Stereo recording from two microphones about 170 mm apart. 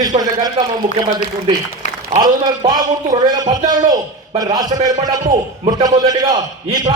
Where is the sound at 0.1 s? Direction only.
40° right (ahead or behind).